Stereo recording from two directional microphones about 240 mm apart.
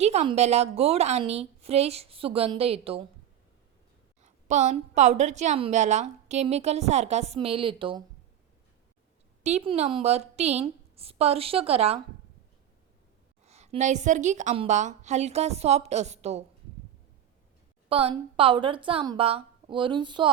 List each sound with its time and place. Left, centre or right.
0.0 s a woman's voice: right
4.2 s a woman's voice: right
9.4 s a woman's voice: right
13.4 s a woman's voice: right
17.8 s a woman's voice: right